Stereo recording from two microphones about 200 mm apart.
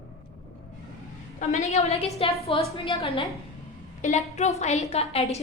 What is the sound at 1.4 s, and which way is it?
A woman's voice, 35° left (ahead or behind).